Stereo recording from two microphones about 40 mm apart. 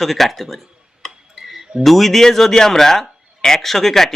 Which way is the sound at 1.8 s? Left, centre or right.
Centre.